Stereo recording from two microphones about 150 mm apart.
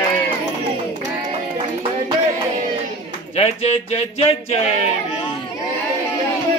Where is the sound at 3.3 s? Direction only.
45° left (ahead or behind).